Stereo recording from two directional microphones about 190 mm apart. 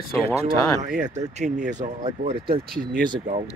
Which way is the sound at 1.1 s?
35° right (ahead or behind).